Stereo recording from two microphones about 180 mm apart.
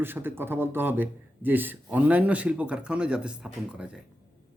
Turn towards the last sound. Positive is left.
turn(degrees=-5)  # may be behind; listen again after turning